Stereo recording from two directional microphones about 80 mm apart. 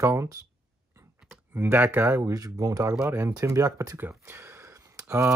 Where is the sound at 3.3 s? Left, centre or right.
Right.